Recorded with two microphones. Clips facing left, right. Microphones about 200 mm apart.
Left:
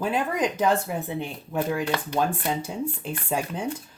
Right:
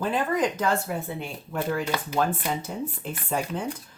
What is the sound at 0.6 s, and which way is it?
Speech, 20° left (ahead or behind).